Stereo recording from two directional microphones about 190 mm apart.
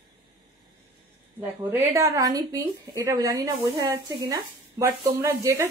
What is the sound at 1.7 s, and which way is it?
A woman's voice, 15° right (ahead or behind).